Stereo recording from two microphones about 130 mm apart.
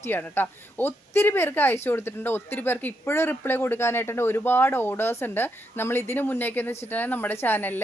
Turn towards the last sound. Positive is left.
turn(degrees=15)  # may be behind; listen again after turning